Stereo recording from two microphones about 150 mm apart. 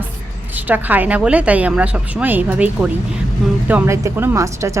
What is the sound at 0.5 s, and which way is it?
Speech, 10° right (ahead or behind).